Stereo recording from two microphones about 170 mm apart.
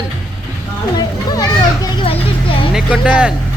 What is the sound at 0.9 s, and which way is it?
Children playing, 20° left (ahead or behind).